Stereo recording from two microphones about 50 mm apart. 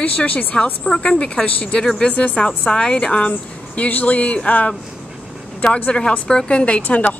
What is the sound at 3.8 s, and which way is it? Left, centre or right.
Speech, left.